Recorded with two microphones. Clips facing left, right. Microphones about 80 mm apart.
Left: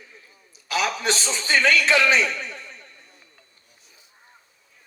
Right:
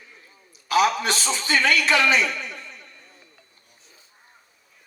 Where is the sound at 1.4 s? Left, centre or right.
Left.